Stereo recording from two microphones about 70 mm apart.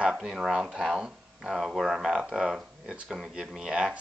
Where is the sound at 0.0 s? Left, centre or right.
Centre.